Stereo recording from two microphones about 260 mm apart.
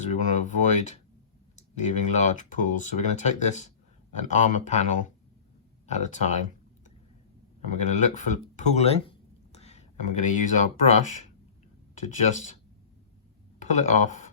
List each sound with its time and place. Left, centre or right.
0.0 s speech: left
7.7 s speech: left
12.3 s speech: left
13.6 s speech: left